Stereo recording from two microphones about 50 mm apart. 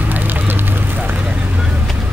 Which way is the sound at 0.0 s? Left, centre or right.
Right.